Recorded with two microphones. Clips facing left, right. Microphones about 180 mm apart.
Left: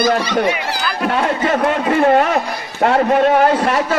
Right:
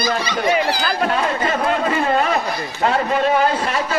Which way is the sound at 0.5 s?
35° right (ahead or behind).